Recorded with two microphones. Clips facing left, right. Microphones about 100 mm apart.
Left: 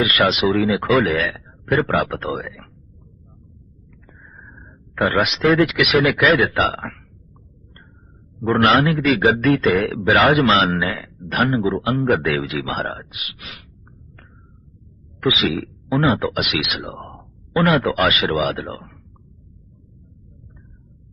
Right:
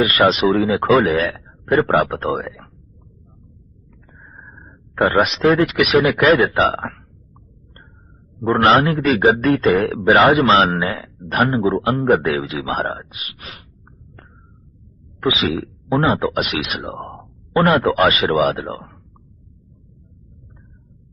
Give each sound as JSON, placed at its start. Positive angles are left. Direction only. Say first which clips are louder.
{"t": 0.0, "sound": "a man's voice", "louder": "right 3 dB", "side_deg": -35}
{"t": 3.8, "sound": "a sound", "louder": "right 2 dB", "side_deg": -35}
{"t": 5.1, "sound": "a man's voice", "louder": "right 1 dB", "side_deg": -35}
{"t": 8.4, "sound": "a man's voice", "louder": "right 2 dB", "side_deg": -30}
{"t": 15.2, "sound": "speech", "louder": "right 1 dB", "side_deg": -35}